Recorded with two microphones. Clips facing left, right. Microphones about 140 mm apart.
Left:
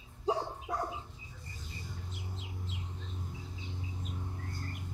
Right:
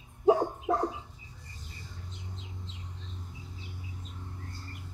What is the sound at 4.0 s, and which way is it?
Bird, 15° left (ahead or behind).